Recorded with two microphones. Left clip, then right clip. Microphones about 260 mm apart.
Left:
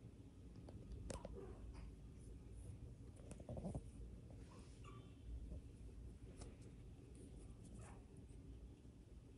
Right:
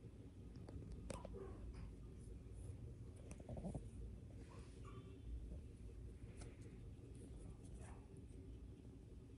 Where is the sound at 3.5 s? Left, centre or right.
Centre.